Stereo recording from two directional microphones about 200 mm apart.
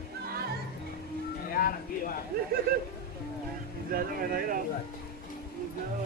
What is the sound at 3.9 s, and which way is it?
Speech, 45° right (ahead or behind).